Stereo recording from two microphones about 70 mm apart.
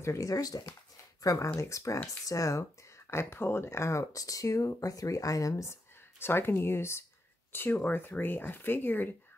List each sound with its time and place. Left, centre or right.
0.0 s speech: left
3.1 s speech: left
5.7 s speech: left